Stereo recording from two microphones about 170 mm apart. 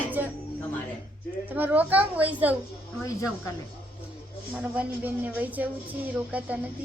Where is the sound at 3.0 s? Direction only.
20° left (ahead or behind).